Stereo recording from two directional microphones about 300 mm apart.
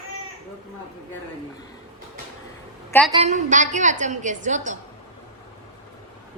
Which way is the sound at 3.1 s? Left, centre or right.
Centre.